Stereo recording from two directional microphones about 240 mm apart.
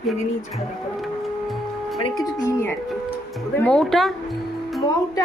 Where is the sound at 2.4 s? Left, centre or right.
Centre.